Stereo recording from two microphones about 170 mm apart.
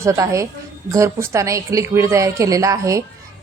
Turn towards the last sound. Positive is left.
turn(degrees=-20)  # may be behind; listen again after turning